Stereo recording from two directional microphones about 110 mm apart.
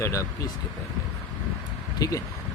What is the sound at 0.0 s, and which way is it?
Speech, 30° left (ahead or behind).